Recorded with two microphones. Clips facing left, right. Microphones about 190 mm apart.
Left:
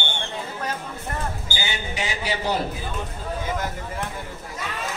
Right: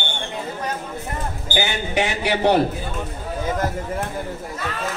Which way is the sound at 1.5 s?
60° right (ahead or behind).